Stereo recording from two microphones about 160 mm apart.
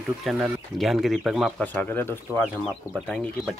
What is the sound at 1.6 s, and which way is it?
Speech, 10° left (ahead or behind).